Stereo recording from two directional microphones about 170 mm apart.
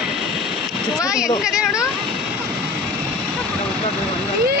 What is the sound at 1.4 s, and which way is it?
Speech, 5° right (ahead or behind).